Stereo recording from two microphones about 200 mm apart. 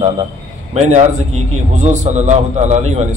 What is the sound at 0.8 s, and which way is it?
A man's voice, 35° right (ahead or behind).